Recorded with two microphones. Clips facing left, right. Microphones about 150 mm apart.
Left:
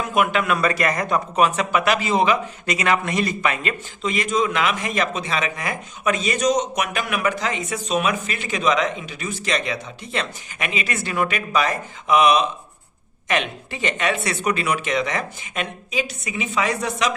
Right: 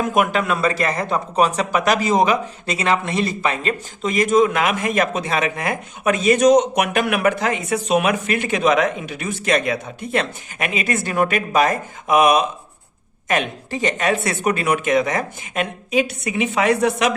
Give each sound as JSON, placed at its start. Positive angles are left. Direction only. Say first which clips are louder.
{"t": 0.0, "sound": "a man's voice", "louder": "right 2 dB", "side_deg": -45}
{"t": 0.5, "sound": "a man's voice", "louder": "right 1 dB", "side_deg": -30}